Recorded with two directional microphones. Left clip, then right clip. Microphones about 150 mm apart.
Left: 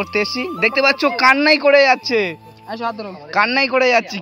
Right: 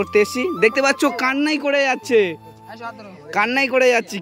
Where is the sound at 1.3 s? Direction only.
5° right (ahead or behind).